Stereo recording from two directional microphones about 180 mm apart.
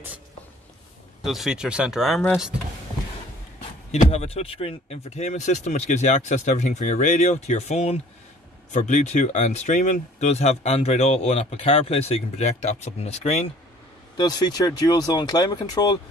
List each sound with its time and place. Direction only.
1.2 s speech: centre (ahead or behind)
3.9 s speech: 35° left (ahead or behind)
14.1 s speech: 25° left (ahead or behind)